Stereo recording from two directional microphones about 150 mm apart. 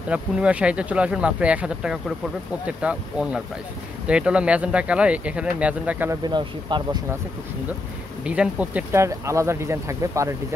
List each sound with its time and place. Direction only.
0.1 s speech: 10° right (ahead or behind)
6.2 s speech: 30° right (ahead or behind)
8.2 s speech: 10° right (ahead or behind)